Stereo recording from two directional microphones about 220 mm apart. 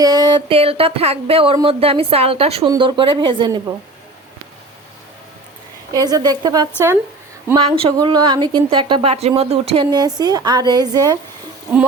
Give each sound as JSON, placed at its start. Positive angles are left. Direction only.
{"t": 0.0, "sound": "a woman's voice", "side_deg": -20}
{"t": 5.9, "sound": "a woman's voice", "side_deg": -15}